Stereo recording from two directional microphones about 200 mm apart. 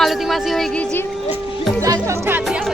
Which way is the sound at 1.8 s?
15° right (ahead or behind).